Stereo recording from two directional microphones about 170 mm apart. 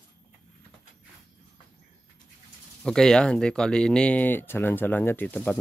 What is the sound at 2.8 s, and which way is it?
Speech, 5° left (ahead or behind).